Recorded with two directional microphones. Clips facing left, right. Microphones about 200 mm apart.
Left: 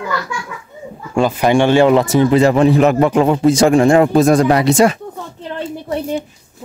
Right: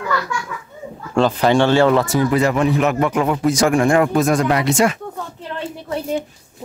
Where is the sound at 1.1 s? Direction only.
10° left (ahead or behind); by 5.0 s 35° left (ahead or behind).